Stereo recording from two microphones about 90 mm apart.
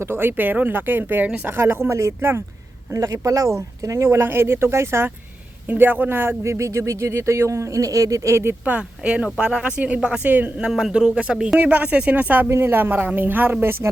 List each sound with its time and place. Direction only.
0.0 s speech: 25° right (ahead or behind)
8.6 s speech: 15° right (ahead or behind)
10.7 s speech: 5° right (ahead or behind); by 13.9 s 25° right (ahead or behind)